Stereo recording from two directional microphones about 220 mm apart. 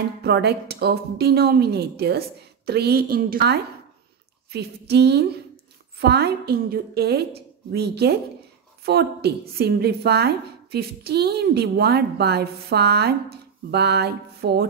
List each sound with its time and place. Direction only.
0.2 s a woman's voice: 45° right (ahead or behind)